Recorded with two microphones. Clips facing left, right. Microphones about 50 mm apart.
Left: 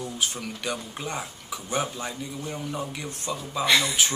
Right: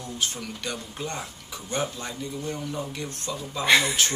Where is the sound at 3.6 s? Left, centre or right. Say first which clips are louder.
Right 2 dB; centre.